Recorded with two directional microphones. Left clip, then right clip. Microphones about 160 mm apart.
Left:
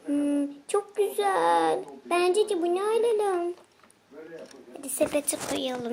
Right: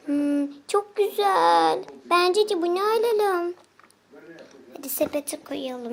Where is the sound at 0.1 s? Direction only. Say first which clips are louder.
Right 2 dB; 10° right (ahead or behind).